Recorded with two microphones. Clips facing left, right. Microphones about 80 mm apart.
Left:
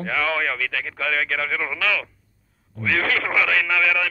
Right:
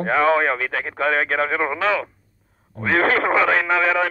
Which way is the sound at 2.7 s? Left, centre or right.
Right.